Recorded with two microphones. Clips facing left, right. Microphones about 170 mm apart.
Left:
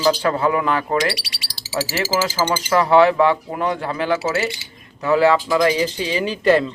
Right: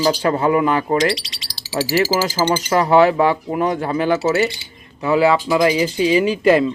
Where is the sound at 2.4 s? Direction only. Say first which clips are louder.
Right 1 dB; 15° right (ahead or behind).